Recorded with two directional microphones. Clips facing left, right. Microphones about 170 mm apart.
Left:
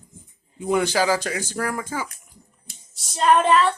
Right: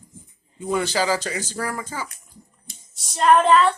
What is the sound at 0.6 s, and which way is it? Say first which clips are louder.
Speech: left 2 dB; 15° left (ahead or behind).